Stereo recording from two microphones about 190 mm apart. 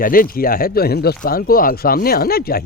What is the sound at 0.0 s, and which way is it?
A man's voice, 50° left (ahead or behind).